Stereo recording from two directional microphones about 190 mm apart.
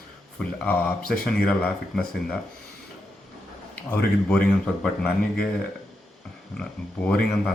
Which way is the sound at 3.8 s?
5° left (ahead or behind).